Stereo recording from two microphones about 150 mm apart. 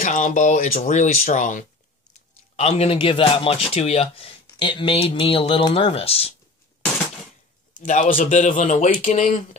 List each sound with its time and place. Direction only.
0.0 s speech: 55° left (ahead or behind)
2.5 s speech: 45° left (ahead or behind)
7.8 s speech: 55° left (ahead or behind)